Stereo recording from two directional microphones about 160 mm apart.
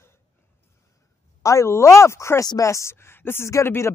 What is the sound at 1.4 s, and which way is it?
Speech, 20° left (ahead or behind).